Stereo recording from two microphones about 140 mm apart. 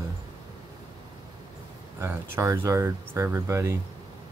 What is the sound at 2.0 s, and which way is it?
Speech, 20° right (ahead or behind).